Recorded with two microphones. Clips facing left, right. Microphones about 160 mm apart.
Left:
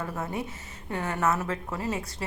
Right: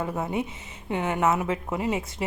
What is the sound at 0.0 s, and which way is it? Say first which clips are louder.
A woman's voice: right 4 dB; 20° right (ahead or behind).